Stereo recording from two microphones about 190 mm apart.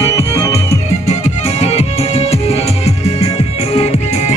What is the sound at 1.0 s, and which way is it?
Music, 35° left (ahead or behind).